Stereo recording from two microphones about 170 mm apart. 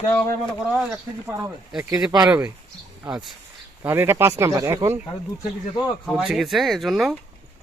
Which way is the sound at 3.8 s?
15° right (ahead or behind).